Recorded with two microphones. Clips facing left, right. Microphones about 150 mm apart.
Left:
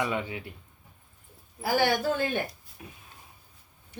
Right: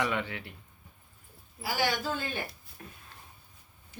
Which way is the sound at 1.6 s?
55° left (ahead or behind).